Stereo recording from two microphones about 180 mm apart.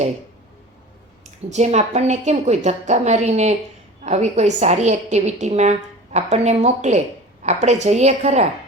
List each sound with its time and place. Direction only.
1.5 s a woman's voice: 40° right (ahead or behind)